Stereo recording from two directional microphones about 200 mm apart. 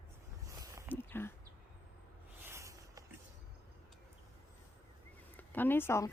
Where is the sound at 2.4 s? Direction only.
15° right (ahead or behind).